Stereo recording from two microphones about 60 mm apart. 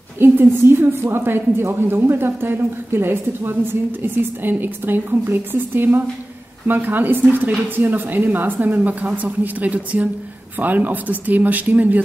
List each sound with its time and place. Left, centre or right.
0.2 s a woman's voice: right